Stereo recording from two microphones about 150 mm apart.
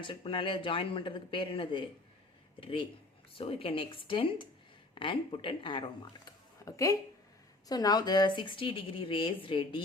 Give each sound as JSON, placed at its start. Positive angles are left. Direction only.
{"t": 0.0, "sound": "speech", "side_deg": 35}
{"t": 6.2, "sound": "a sound", "side_deg": 20}
{"t": 7.7, "sound": "a woman's voice", "side_deg": 25}